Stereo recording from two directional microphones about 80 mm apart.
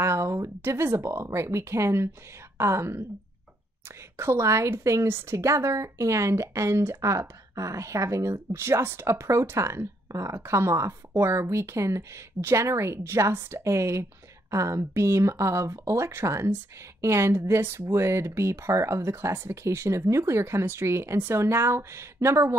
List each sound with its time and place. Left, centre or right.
0.0 s speech: right
4.2 s speech: right
8.5 s speech: right